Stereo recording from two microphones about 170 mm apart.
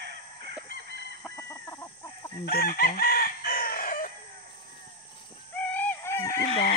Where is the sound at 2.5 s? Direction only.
60° left (ahead or behind).